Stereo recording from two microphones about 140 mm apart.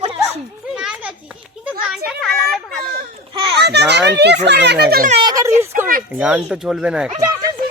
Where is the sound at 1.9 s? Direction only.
Centre (ahead or behind).